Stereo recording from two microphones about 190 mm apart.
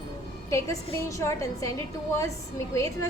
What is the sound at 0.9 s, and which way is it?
Speech, 15° left (ahead or behind).